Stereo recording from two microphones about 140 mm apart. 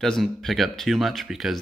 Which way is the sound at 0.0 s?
5° left (ahead or behind).